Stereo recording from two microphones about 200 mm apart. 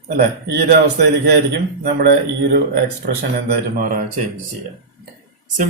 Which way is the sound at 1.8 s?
55° right (ahead or behind).